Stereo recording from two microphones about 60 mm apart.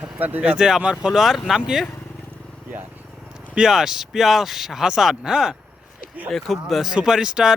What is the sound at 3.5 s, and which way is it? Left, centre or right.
Speech, centre.